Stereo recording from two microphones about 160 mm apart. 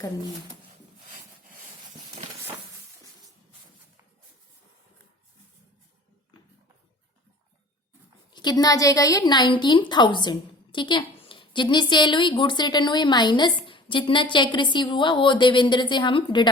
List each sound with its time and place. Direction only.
8.3 s a woman's voice: 25° left (ahead or behind)